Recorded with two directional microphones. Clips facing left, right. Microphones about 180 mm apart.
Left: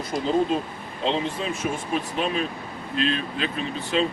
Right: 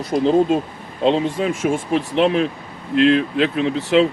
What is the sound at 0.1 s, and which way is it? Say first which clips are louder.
Speech: right 10 dB; 50° right (ahead or behind).